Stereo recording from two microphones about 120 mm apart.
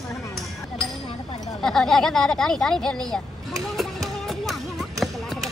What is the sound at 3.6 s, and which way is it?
Music, centre (ahead or behind).